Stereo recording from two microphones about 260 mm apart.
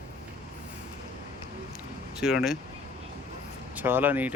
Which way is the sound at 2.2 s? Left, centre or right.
Centre.